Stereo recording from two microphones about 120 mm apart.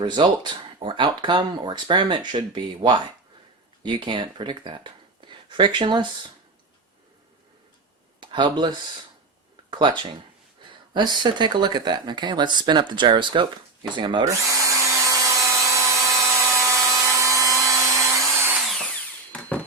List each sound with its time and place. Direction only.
0.0 s speech: 40° right (ahead or behind)
8.2 s speech: 40° right (ahead or behind)
10.9 s speech: 40° right (ahead or behind)
14.3 s drill: 25° right (ahead or behind)
18.6 s tools: centre (ahead or behind)
19.3 s a sound: 10° left (ahead or behind)